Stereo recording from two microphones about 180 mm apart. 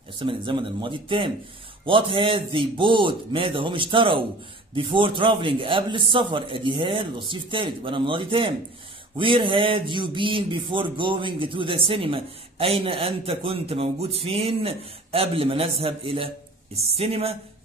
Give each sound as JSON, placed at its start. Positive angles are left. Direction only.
{"t": 0.2, "sound": "a man's voice", "side_deg": -25}